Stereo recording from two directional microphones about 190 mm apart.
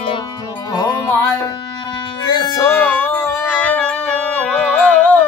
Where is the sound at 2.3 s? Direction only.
20° left (ahead or behind).